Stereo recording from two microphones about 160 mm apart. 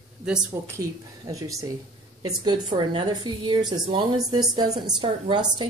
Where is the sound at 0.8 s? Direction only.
20° right (ahead or behind).